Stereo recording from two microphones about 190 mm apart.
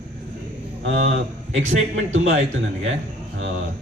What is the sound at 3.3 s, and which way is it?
Speech, 80° right.